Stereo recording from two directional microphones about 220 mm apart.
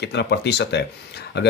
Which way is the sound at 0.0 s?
50° left (ahead or behind).